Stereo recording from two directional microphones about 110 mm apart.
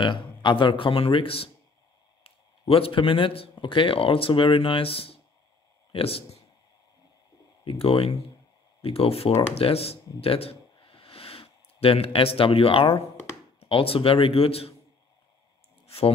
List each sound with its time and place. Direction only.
0.0 s speech: 45° left (ahead or behind)
2.7 s speech: 55° left (ahead or behind)
7.6 s speech: 55° left (ahead or behind)